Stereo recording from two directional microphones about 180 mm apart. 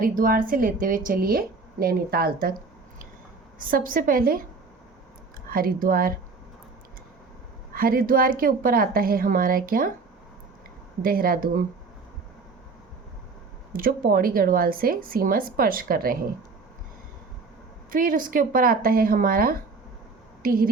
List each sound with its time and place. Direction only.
0.2 s a woman's voice: 50° right (ahead or behind)
3.6 s a woman's voice: 50° right (ahead or behind)
5.5 s a woman's voice: 55° right (ahead or behind)
7.7 s a woman's voice: 55° right (ahead or behind)
11.0 s a woman's voice: 55° right (ahead or behind)
13.7 s a woman's voice: 50° right (ahead or behind)
17.9 s a woman's voice: 50° right (ahead or behind)